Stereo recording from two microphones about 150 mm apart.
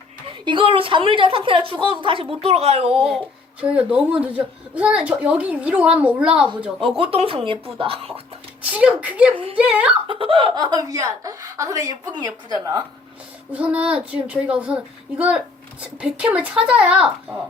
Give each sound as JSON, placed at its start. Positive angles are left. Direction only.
{"t": 0.3, "sound": "a woman's voice", "side_deg": -35}
{"t": 3.6, "sound": "a child's voice", "side_deg": -5}
{"t": 6.8, "sound": "a woman's voice", "side_deg": -40}
{"t": 8.7, "sound": "a child's voice", "side_deg": -10}
{"t": 10.1, "sound": "speech", "side_deg": -35}
{"t": 13.5, "sound": "a child's voice", "side_deg": -10}
{"t": 15.8, "sound": "a child's voice", "side_deg": -5}